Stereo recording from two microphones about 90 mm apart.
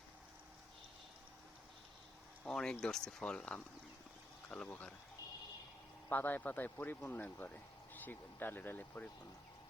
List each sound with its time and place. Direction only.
2.4 s speech: 5° left (ahead or behind)
6.1 s speech: 20° left (ahead or behind)